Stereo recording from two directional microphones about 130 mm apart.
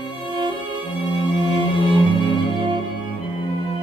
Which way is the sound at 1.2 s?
40° right (ahead or behind).